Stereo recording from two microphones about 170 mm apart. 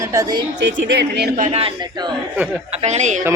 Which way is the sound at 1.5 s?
35° right (ahead or behind).